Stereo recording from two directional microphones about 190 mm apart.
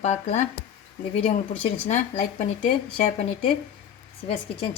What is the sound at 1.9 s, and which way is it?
Speech, 35° left (ahead or behind).